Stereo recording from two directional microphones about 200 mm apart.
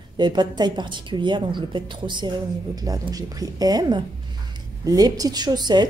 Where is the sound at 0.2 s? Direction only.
20° right (ahead or behind).